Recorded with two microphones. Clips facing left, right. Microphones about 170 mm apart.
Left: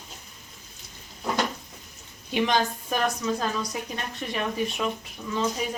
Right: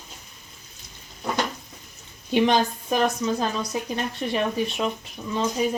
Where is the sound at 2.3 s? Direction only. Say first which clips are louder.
Right 4 dB; 30° right (ahead or behind).